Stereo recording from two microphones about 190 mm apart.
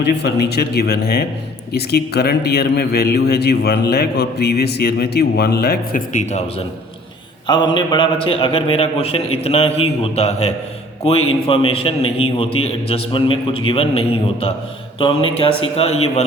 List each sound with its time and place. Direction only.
0.0 s a man's voice: 60° left (ahead or behind); by 6.4 s 45° left (ahead or behind)
7.4 s a man's voice: 25° left (ahead or behind)